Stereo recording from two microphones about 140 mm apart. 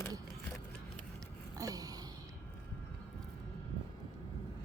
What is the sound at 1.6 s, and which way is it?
Speech, 25° right (ahead or behind).